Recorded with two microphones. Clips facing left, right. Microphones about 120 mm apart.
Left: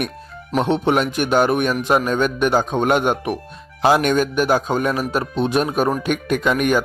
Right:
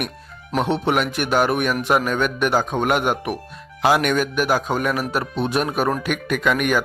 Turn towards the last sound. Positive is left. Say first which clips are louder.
# left 2 dB
turn(degrees=25)  # may be behind; listen again after turning